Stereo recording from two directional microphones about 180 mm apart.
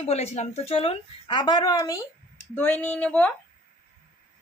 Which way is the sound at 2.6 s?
10° left (ahead or behind).